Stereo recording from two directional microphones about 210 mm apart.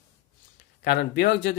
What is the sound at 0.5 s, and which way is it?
Speech, 55° left (ahead or behind).